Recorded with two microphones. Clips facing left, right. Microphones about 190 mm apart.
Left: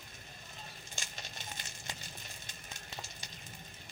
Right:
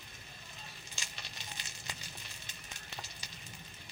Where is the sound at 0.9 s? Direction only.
50° left (ahead or behind).